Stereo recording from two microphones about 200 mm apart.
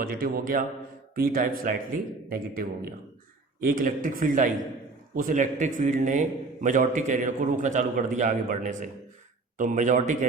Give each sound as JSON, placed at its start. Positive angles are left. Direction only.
{"t": 0.0, "sound": "a man's voice", "side_deg": -45}